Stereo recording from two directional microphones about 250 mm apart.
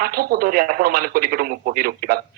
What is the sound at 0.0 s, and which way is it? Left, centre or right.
A woman's voice, right.